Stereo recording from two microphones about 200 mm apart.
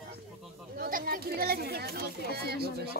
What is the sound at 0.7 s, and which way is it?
Speech, 50° right (ahead or behind).